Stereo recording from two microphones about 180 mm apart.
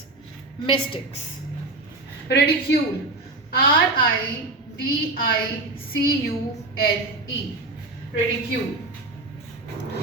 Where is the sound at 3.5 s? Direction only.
55° left (ahead or behind).